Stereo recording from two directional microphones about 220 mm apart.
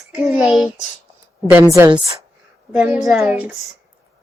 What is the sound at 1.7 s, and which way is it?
Speech, 15° right (ahead or behind).